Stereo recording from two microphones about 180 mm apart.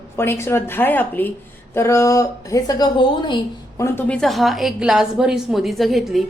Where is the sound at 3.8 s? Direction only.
10° left (ahead or behind).